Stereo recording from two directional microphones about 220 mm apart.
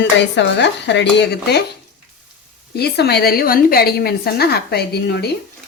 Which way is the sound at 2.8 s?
45° left (ahead or behind).